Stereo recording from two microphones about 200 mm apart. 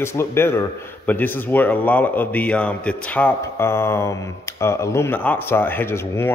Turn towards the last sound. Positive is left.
turn(degrees=10)  # may be behind; listen again after turning